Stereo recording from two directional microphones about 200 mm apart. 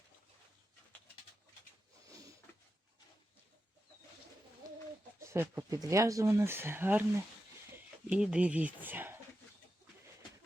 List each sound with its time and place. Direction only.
2.0 s a sound: 15° right (ahead or behind)
5.2 s speech: 10° right (ahead or behind)
8.0 s speech: 5° right (ahead or behind)